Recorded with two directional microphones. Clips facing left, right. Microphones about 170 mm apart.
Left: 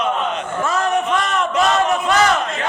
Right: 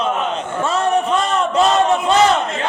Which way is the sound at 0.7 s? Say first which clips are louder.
Right 2 dB; 30° right (ahead or behind).